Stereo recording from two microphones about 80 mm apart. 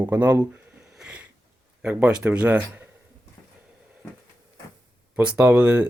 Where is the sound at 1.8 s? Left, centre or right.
Centre.